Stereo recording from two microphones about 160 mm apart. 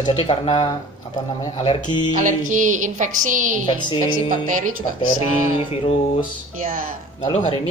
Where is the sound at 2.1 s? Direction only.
55° right (ahead or behind).